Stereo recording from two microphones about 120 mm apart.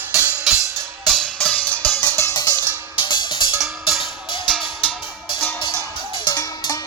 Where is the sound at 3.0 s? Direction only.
45° left (ahead or behind).